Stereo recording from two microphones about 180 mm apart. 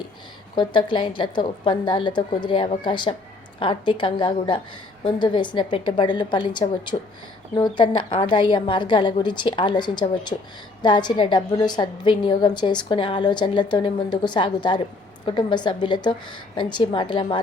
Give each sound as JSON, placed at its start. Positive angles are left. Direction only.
{"t": 0.5, "sound": "a woman's voice", "side_deg": 25}